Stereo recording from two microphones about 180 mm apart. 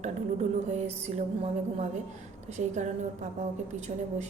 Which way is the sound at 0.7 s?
40° right (ahead or behind).